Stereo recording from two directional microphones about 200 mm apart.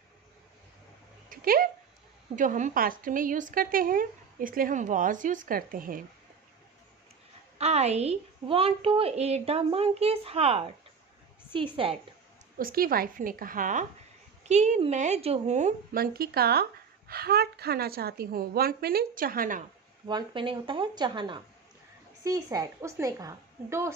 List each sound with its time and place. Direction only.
1.3 s a woman's voice: 45° right (ahead or behind)
7.5 s a woman's voice: 30° right (ahead or behind)
12.5 s a woman's voice: 45° right (ahead or behind)
16.0 s a woman's voice: 50° right (ahead or behind)
20.1 s a woman's voice: 25° right (ahead or behind)